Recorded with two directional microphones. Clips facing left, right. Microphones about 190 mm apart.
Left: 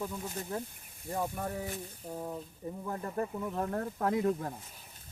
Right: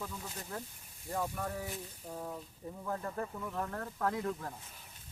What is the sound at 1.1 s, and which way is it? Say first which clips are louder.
Speech: left 2 dB; 20° left (ahead or behind).